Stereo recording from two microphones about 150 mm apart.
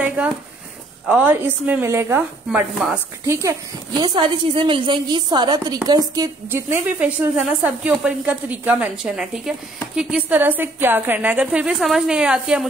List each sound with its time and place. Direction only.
0.0 s a sound: 10° right (ahead or behind)
1.0 s a woman's voice: 10° right (ahead or behind)
4.0 s a woman's voice: 30° right (ahead or behind)
6.5 s a woman's voice: 10° right (ahead or behind)